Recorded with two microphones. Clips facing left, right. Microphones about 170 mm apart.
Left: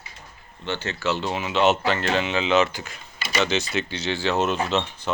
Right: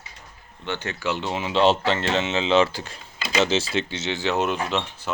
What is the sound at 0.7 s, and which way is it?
Speech, 15° right (ahead or behind).